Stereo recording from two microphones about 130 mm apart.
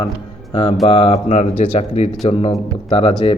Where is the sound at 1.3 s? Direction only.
65° left (ahead or behind).